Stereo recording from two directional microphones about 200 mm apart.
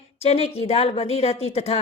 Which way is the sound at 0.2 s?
30° left (ahead or behind).